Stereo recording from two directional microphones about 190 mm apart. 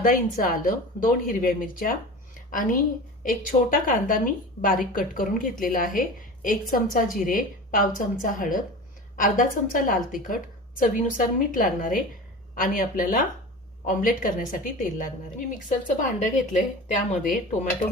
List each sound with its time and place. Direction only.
0.0 s a woman's voice: 45° left (ahead or behind)